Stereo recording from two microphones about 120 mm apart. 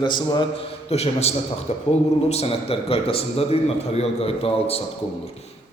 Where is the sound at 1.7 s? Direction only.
75° left (ahead or behind).